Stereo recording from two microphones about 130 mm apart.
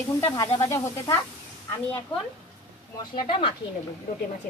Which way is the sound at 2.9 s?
35° left (ahead or behind).